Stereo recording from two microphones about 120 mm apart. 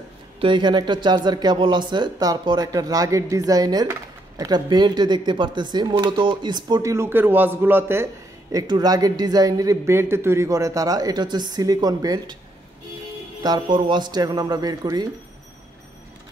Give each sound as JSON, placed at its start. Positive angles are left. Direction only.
{"t": 0.4, "sound": "speech", "side_deg": -40}
{"t": 6.8, "sound": "a man's voice", "side_deg": -25}
{"t": 13.4, "sound": "speech", "side_deg": -40}